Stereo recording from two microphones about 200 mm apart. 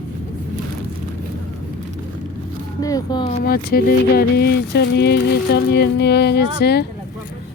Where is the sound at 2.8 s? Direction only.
20° left (ahead or behind).